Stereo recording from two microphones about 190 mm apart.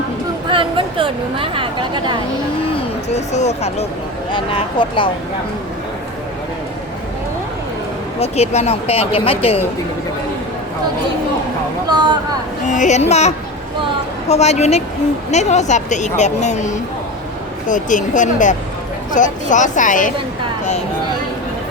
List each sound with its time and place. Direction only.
0.5 s speech: 25° right (ahead or behind)
3.1 s speech: 35° left (ahead or behind)
8.2 s speech: 35° left (ahead or behind)
11.9 s speech: 20° right (ahead or behind)
12.6 s speech: 40° left (ahead or behind)